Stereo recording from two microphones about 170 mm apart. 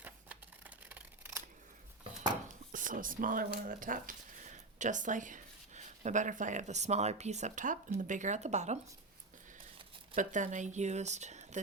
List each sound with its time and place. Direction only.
0.0 s scissors: 10° right (ahead or behind)
2.7 s speech: 50° right (ahead or behind)
10.2 s speech: 50° right (ahead or behind)